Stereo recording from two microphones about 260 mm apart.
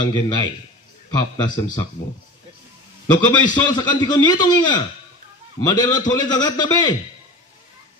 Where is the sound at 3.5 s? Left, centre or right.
Centre.